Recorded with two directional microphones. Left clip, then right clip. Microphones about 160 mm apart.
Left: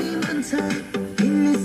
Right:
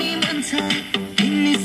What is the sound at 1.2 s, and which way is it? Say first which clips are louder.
Music: right 1 dB; 20° right (ahead or behind).